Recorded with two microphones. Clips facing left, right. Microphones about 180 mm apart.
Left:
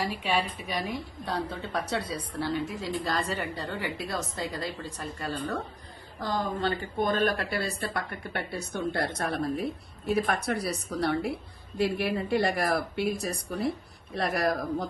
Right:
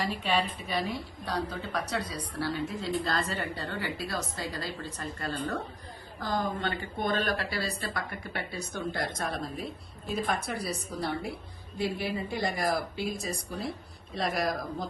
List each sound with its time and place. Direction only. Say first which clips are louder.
0.0 s a woman's voice: even; 10° left (ahead or behind)
6.6 s speech: left 4 dB; 35° left (ahead or behind); by 14.8 s 60° left (ahead or behind)